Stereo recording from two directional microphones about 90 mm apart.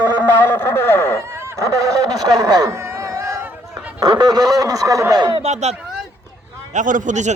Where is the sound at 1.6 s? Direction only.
35° right (ahead or behind).